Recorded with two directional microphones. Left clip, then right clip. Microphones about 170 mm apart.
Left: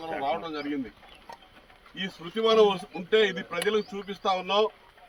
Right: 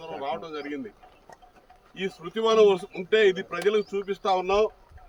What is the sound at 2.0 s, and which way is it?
Speech, 25° right (ahead or behind).